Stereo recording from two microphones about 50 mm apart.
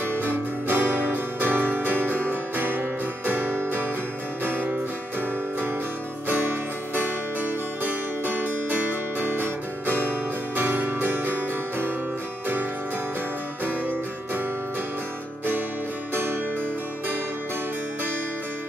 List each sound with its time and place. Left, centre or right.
0.0 s music: right
6.2 s music: right